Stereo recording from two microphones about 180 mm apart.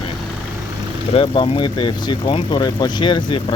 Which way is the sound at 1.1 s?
30° left (ahead or behind).